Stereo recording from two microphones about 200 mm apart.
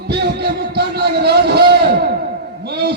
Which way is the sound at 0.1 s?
55° right (ahead or behind).